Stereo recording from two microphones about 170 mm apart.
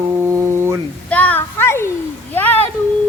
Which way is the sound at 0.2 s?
15° right (ahead or behind).